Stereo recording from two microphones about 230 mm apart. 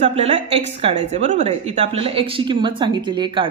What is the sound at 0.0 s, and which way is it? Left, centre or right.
Speech, right.